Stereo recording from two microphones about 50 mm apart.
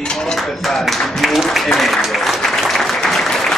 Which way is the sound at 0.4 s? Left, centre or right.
Centre.